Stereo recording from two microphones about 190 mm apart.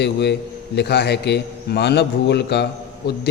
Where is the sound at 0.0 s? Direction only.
65° left (ahead or behind).